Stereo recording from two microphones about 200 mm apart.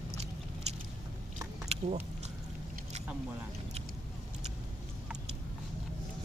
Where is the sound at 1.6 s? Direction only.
35° right (ahead or behind).